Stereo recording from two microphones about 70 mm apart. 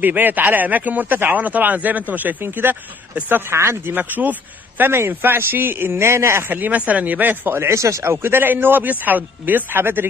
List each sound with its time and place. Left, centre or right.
0.0 s speech: right
6.5 s speech: right